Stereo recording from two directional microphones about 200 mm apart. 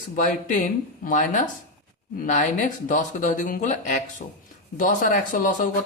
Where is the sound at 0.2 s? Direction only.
40° left (ahead or behind).